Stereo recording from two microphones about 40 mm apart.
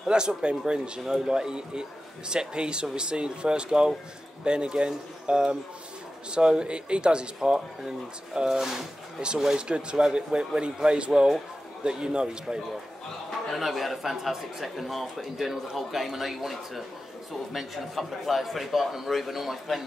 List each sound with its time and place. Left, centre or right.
0.0 s speech: centre
13.5 s speech: centre